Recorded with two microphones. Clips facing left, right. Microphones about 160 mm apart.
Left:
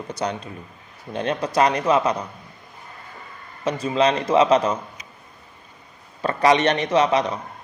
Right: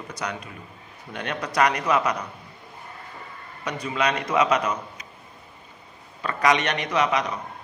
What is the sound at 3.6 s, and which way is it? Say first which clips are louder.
A man's voice: left 6 dB; 25° left (ahead or behind).